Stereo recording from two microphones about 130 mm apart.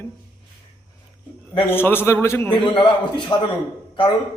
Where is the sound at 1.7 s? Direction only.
15° left (ahead or behind).